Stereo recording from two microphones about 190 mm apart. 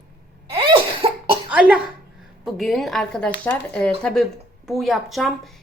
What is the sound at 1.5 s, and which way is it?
A child's voice, 5° right (ahead or behind).